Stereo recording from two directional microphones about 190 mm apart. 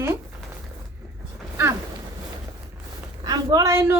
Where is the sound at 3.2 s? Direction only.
20° right (ahead or behind).